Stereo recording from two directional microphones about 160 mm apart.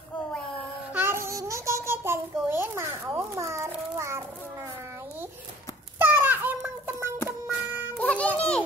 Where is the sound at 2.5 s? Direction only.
15° right (ahead or behind).